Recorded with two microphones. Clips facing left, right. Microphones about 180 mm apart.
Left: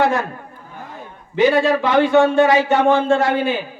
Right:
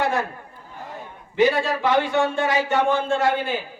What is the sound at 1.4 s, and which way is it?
A man's voice, 90° left.